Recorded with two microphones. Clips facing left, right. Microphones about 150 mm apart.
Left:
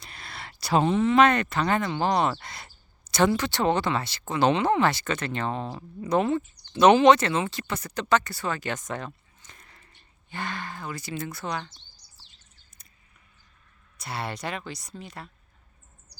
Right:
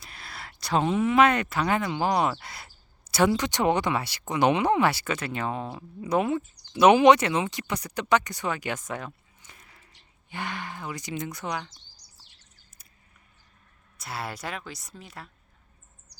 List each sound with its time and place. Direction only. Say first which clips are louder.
0.0 s speech: left 1 dB; centre (ahead or behind)
11.9 s chirp: even; 30° left (ahead or behind)
14.0 s speech: left 2 dB; centre (ahead or behind)